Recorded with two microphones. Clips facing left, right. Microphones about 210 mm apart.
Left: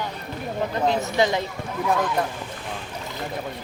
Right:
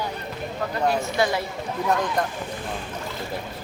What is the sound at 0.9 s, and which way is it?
Speech, 20° left (ahead or behind).